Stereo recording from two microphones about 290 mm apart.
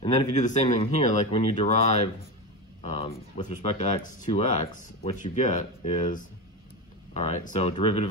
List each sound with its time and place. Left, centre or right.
0.0 s speech: left